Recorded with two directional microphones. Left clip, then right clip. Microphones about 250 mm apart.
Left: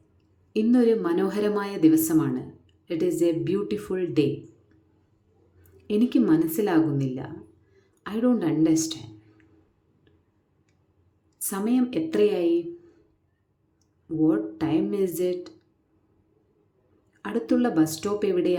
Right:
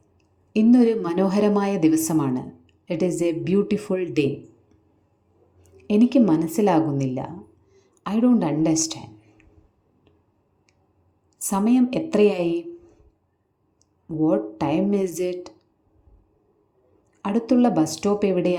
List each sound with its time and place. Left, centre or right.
0.5 s a woman's voice: centre
5.7 s a woman's voice: centre
11.3 s a woman's voice: centre
14.2 s a woman's voice: centre
17.2 s a woman's voice: centre